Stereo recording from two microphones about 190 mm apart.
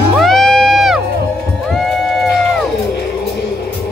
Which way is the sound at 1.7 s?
Centre (ahead or behind).